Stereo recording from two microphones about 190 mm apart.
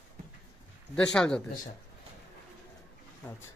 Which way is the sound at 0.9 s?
5° left (ahead or behind).